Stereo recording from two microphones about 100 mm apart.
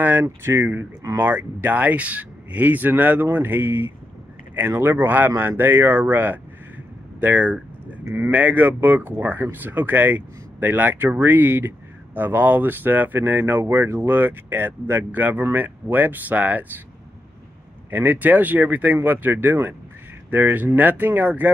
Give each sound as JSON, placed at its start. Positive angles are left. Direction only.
{"t": 0.0, "sound": "speech", "side_deg": -20}
{"t": 17.9, "sound": "speech", "side_deg": -20}